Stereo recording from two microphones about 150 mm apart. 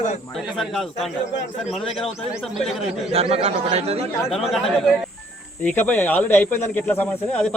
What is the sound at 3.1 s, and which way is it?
Speech, 40° right (ahead or behind).